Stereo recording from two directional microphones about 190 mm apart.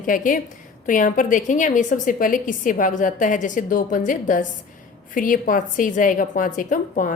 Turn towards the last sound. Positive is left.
turn(degrees=45)  # may be behind; listen again after turning